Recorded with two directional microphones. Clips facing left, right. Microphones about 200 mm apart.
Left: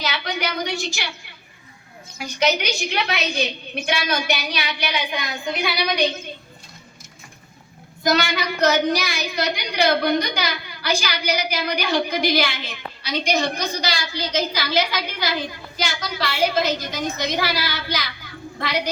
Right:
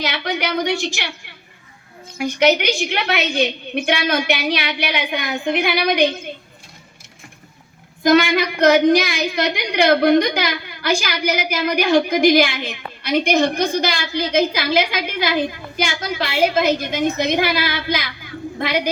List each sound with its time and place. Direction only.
0.0 s a woman's voice: 55° right (ahead or behind)
2.1 s a woman's voice: 55° right (ahead or behind)
8.1 s a woman's voice: 50° right (ahead or behind)